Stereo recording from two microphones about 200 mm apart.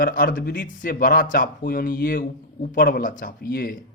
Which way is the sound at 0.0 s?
45° left (ahead or behind).